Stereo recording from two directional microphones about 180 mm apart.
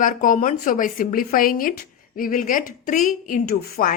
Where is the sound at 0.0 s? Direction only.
45° left (ahead or behind).